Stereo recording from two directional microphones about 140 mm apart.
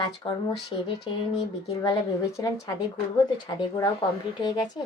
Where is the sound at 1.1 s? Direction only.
40° left (ahead or behind).